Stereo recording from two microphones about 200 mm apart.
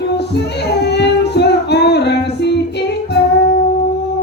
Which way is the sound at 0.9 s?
55° left (ahead or behind).